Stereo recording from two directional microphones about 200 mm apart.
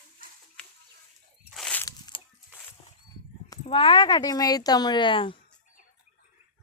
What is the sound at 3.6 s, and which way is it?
Speech, 25° left (ahead or behind).